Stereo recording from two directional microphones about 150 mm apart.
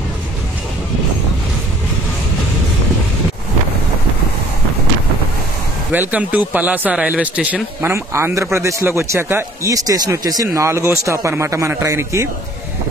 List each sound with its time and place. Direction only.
5.9 s speech: 10° right (ahead or behind)